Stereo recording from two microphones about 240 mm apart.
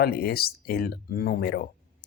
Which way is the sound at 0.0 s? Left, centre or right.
Left.